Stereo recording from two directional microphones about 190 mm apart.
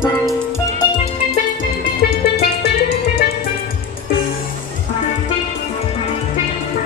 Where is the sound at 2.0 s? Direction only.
55° left (ahead or behind).